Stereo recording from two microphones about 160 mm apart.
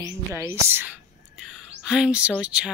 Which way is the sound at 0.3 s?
15° right (ahead or behind).